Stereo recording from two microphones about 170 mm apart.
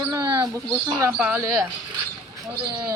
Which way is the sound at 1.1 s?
5° right (ahead or behind).